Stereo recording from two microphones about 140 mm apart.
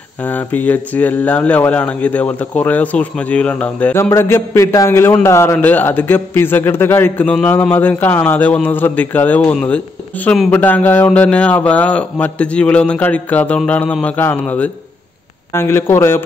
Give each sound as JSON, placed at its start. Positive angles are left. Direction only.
{"t": 0.2, "sound": "speech", "side_deg": 10}
{"t": 10.5, "sound": "speech", "side_deg": 15}
{"t": 15.5, "sound": "speech", "side_deg": 15}